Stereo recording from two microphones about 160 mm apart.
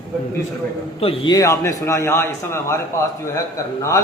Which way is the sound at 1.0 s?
35° left (ahead or behind).